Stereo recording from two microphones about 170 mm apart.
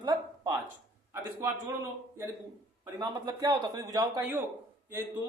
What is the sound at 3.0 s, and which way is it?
Speech, 25° right (ahead or behind).